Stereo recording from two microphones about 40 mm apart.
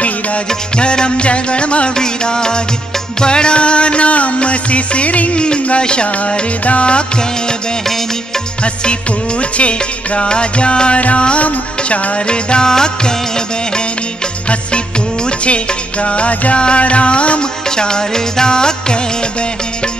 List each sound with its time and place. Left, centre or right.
0.7 s music: left
9.6 s music: left
15.4 s music: left